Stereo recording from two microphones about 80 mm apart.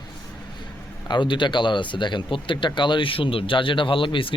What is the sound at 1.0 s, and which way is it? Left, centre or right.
Speech, left.